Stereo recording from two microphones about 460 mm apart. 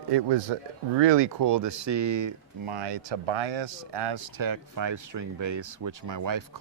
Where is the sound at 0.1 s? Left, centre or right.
Right.